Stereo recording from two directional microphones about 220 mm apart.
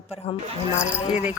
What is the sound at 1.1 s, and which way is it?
Speech, 5° right (ahead or behind).